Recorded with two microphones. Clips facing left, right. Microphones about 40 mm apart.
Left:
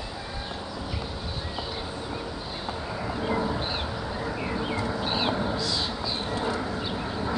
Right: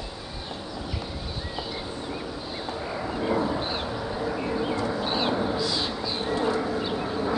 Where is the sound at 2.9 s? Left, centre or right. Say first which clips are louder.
Right 2 dB; centre.